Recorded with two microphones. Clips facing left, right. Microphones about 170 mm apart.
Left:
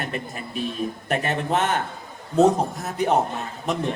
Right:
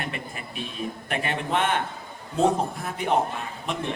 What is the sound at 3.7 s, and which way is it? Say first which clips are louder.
Speech: left 5 dB; 40° left (ahead or behind).